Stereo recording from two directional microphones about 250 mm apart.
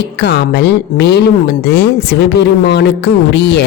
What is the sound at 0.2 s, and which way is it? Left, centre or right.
A man's voice, left.